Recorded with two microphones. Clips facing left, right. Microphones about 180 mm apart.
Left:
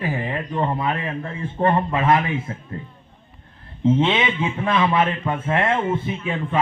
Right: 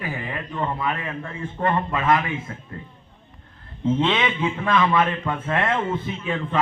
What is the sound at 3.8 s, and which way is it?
A man's voice, 20° left (ahead or behind).